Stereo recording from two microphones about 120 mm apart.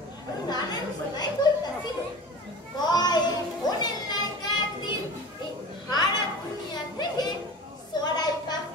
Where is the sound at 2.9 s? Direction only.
35° left (ahead or behind).